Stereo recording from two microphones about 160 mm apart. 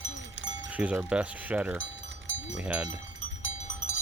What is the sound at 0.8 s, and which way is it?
Speech, 5° right (ahead or behind).